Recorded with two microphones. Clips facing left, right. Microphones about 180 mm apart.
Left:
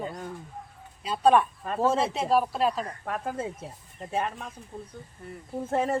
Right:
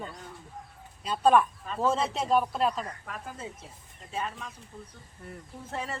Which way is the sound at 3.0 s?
60° left (ahead or behind).